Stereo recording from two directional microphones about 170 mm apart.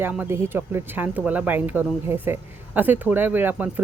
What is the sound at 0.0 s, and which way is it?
Speech, 10° right (ahead or behind).